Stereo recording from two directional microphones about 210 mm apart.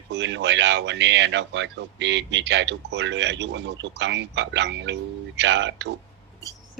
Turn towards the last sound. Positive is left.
turn(degrees=-55)  # may be behind; listen again after turning